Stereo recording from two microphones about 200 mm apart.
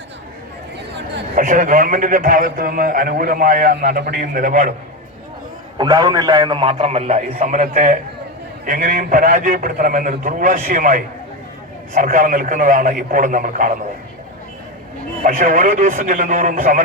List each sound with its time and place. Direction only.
0.8 s a sound: 60° right (ahead or behind)
1.4 s a man's voice: 40° right (ahead or behind)
5.7 s a man's voice: 20° right (ahead or behind); by 13.7 s 40° right (ahead or behind)
15.2 s a man's voice: 40° right (ahead or behind)